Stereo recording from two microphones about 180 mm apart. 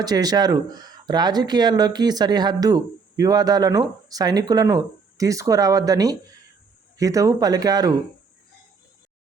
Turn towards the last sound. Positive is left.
turn(degrees=-20)  # may be behind; listen again after turning